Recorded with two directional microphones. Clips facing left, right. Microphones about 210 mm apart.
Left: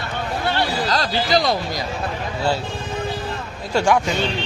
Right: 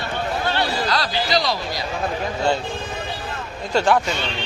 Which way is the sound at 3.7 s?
10° left (ahead or behind).